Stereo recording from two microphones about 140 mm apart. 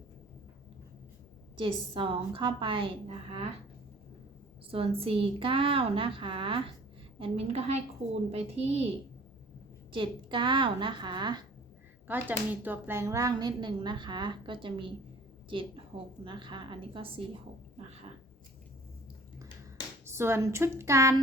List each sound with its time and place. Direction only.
1.5 s speech: 35° right (ahead or behind)
4.7 s a woman's voice: 40° right (ahead or behind)
9.9 s speech: 35° right (ahead or behind)
12.0 s speech: 15° right (ahead or behind); by 17.2 s 35° right (ahead or behind)
20.1 s speech: 20° right (ahead or behind)